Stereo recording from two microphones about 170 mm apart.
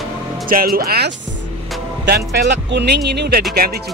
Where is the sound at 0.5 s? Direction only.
60° right (ahead or behind).